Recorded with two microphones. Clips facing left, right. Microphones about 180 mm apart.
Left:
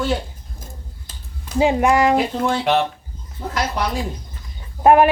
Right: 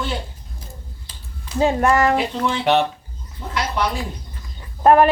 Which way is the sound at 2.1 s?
45° left (ahead or behind).